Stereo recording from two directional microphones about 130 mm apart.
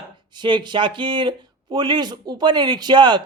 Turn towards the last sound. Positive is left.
turn(degrees=-35)  # may be behind; listen again after turning